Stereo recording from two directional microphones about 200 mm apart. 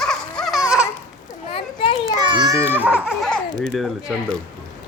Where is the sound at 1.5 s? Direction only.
25° left (ahead or behind).